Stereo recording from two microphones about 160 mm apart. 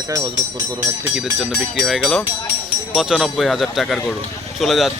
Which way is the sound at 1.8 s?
Centre (ahead or behind).